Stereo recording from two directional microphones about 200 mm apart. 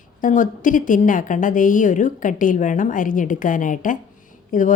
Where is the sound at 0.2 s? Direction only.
40° left (ahead or behind).